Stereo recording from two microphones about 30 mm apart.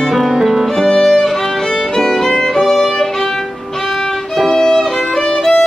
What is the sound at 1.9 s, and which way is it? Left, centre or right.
Music, centre.